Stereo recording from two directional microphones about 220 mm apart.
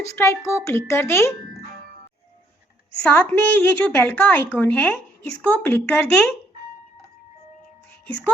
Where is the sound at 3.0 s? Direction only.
5° left (ahead or behind).